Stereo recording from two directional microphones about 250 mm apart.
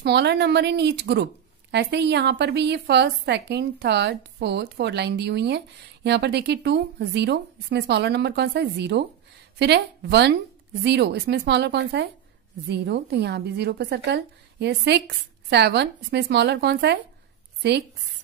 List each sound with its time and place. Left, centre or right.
0.0 s a woman's voice: right